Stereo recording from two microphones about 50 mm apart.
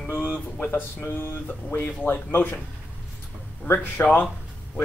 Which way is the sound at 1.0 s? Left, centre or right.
Left.